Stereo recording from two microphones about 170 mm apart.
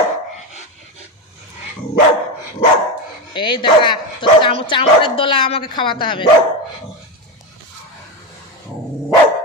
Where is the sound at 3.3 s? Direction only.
25° left (ahead or behind).